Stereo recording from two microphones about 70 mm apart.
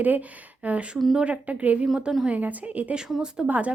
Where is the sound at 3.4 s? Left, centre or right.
Right.